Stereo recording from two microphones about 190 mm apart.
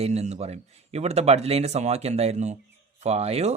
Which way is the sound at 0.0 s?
35° right (ahead or behind).